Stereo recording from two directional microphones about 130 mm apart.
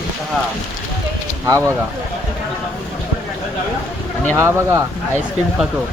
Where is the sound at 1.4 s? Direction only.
25° right (ahead or behind).